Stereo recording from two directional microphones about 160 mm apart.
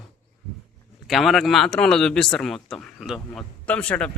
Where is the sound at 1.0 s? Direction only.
Centre (ahead or behind).